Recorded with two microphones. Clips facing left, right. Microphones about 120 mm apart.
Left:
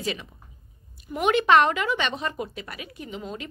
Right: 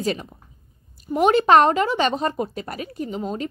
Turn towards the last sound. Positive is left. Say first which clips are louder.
# right 8 dB
turn(degrees=-40)  # may be behind; listen again after turning